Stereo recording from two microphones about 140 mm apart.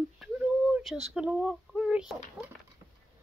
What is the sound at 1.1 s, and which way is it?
Speech, 5° right (ahead or behind).